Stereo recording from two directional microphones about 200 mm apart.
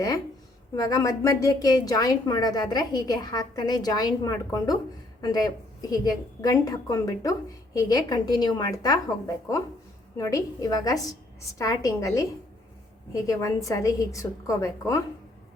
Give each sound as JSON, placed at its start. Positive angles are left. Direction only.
{"t": 0.8, "sound": "a woman's voice", "side_deg": 15}